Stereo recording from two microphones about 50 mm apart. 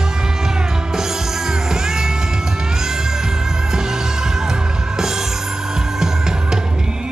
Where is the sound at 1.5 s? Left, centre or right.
Centre.